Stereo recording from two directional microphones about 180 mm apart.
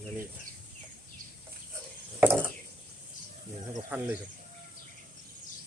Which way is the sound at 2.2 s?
10° right (ahead or behind).